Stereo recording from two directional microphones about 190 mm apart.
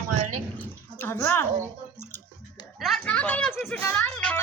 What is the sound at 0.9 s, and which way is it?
Speech, 15° left (ahead or behind).